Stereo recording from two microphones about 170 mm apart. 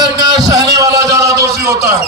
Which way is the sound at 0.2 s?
20° right (ahead or behind).